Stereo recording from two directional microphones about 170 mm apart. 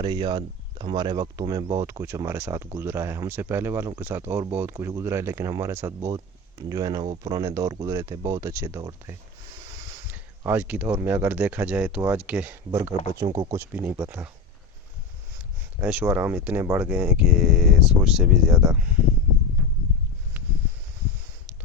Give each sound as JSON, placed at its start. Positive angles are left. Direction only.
{"t": 0.0, "sound": "speech", "side_deg": -30}
{"t": 10.1, "sound": "a sound", "side_deg": -10}
{"t": 11.0, "sound": "speech", "side_deg": -10}
{"t": 13.2, "sound": "speech", "side_deg": -25}
{"t": 15.8, "sound": "speech", "side_deg": -5}